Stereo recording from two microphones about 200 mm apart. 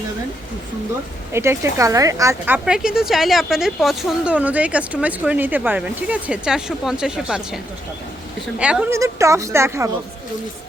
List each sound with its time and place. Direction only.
1.3 s a woman's voice: 15° right (ahead or behind)
2.6 s a woman's voice: 5° right (ahead or behind)